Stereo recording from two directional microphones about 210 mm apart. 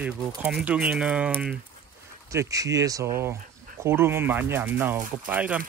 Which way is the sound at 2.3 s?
15° right (ahead or behind).